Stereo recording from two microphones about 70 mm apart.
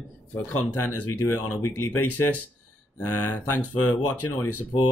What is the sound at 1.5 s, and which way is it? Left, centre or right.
Speech, left.